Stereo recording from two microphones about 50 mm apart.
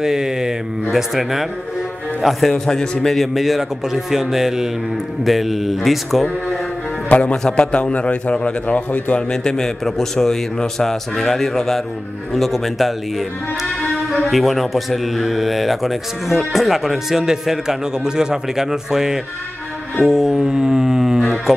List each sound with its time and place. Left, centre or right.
0.0 s mantra: centre
0.9 s speech: centre
2.5 s a man's voice: centre
3.1 s speech: centre
7.1 s a man's voice: left
7.4 s a man's voice: centre
7.7 s a man's voice: left
9.3 s a man's voice: centre
14.1 s speech: centre